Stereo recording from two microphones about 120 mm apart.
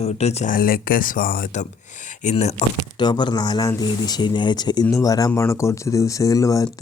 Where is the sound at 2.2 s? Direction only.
90° left.